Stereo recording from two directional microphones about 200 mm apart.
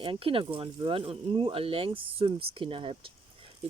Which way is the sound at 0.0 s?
25° right (ahead or behind).